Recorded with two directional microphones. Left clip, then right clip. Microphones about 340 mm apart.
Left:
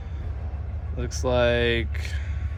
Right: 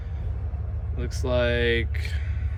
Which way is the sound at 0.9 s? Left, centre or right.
Centre.